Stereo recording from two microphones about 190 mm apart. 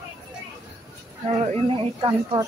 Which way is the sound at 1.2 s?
30° right (ahead or behind).